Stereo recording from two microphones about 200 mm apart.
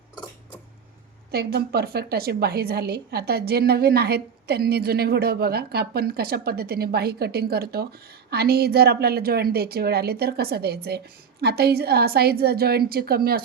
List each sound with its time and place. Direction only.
1.3 s a woman's voice: 50° right (ahead or behind)